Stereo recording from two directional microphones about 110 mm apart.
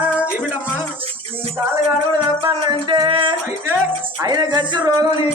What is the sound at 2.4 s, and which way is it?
Music, 50° right (ahead or behind).